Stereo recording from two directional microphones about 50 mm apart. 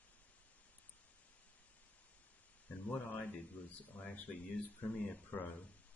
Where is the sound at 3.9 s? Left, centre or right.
Left.